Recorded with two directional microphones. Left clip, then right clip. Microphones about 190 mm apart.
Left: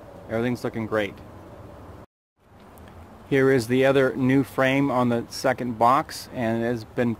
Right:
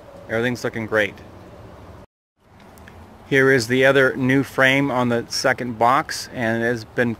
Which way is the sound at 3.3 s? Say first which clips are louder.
Right 4 dB; centre (ahead or behind).